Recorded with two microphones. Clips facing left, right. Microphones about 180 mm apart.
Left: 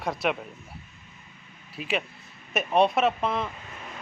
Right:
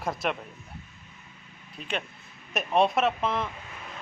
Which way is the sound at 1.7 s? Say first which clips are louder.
Left 4 dB; 5° left (ahead or behind).